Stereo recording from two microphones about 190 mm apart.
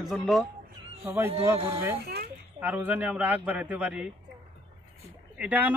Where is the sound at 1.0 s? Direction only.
10° right (ahead or behind).